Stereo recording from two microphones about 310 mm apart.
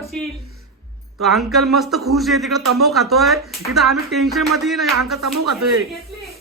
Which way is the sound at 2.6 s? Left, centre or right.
Right.